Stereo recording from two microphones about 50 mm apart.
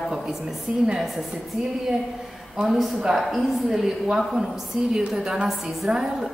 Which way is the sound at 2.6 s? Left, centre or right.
Centre.